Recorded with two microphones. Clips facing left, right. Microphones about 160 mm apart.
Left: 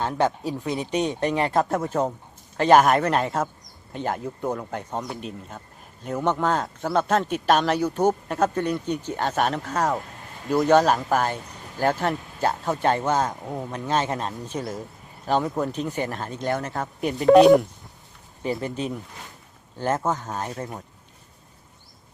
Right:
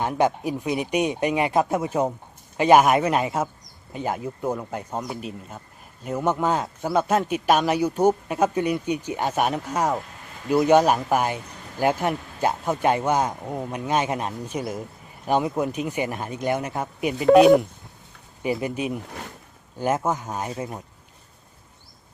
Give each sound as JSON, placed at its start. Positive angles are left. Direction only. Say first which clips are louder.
{"t": 0.0, "sound": "speech", "louder": "right 2 dB", "side_deg": -15}
{"t": 2.8, "sound": "speech", "louder": "even", "side_deg": -5}
{"t": 10.4, "sound": "speech", "louder": "right 2 dB", "side_deg": 0}
{"t": 10.7, "sound": "speech", "louder": "even", "side_deg": -15}
{"t": 13.3, "sound": "speech", "louder": "right 1 dB", "side_deg": 0}
{"t": 13.7, "sound": "speech", "louder": "right 1 dB", "side_deg": -15}
{"t": 17.0, "sound": "speech", "louder": "even", "side_deg": 0}